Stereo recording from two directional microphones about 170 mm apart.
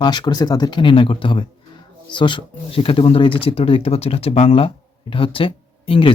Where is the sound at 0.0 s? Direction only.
25° left (ahead or behind).